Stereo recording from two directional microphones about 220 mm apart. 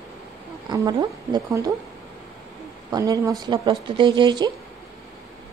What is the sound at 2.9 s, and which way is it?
Speech, 15° right (ahead or behind).